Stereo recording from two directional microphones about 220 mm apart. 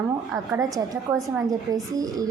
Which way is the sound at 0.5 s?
15° right (ahead or behind).